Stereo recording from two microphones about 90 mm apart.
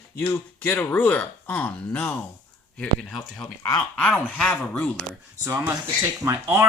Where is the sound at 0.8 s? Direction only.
15° left (ahead or behind).